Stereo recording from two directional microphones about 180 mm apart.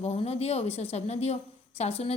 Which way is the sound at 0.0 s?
35° left (ahead or behind).